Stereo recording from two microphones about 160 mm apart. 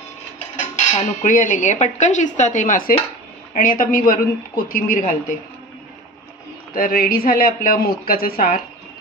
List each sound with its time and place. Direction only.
0.7 s speech: 50° left (ahead or behind)
3.5 s speech: 60° left (ahead or behind)
6.7 s speech: 65° left (ahead or behind)